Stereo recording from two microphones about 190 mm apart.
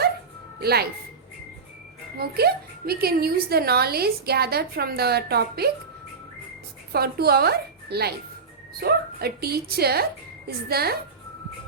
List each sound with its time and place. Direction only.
0.6 s a woman's voice: 55° right (ahead or behind)
2.1 s a woman's voice: 55° right (ahead or behind)
6.9 s a woman's voice: 55° right (ahead or behind)